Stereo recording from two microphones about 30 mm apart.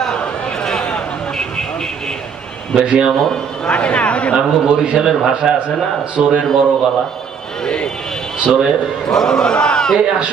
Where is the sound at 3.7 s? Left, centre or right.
Left.